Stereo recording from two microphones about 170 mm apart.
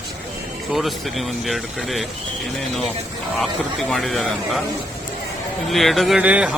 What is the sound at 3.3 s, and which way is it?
Speech, 5° left (ahead or behind).